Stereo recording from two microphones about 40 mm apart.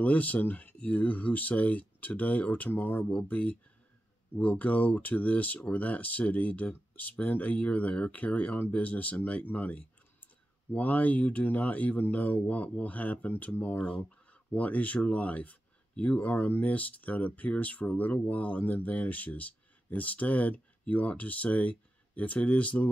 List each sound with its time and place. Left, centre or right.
0.0 s speech: left
3.1 s speech: left